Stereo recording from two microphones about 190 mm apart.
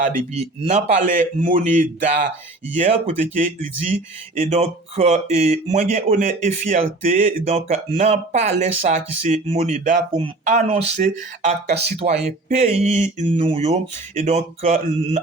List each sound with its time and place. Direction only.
0.0 s speech: 40° right (ahead or behind)